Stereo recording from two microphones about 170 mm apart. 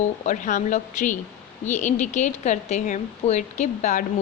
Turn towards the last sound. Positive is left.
turn(degrees=45)  # may be behind; listen again after turning